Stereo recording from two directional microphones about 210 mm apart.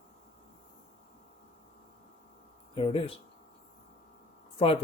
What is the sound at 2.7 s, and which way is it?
Speech, 25° left (ahead or behind).